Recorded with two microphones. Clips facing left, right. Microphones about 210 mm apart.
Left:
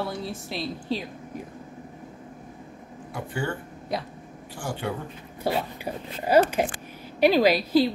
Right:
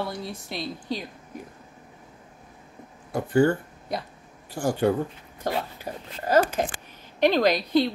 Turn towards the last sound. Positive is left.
turn(degrees=5)  # may be behind; listen again after turning